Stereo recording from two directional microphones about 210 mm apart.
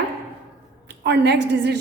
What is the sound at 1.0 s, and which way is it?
Speech, 55° right (ahead or behind).